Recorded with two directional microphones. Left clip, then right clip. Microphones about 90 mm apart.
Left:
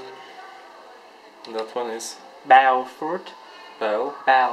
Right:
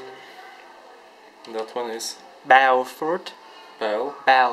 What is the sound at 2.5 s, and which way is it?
Speech, 45° right (ahead or behind).